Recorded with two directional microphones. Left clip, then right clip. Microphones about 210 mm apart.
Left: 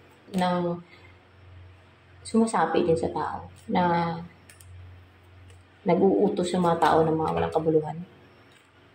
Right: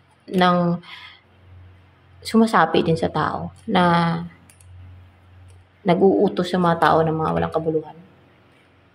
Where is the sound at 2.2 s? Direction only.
25° right (ahead or behind).